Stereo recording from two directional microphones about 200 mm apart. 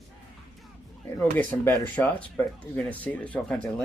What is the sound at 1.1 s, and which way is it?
Speech, 10° left (ahead or behind).